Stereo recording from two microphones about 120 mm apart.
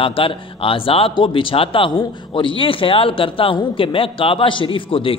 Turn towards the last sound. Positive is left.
turn(degrees=45)  # may be behind; listen again after turning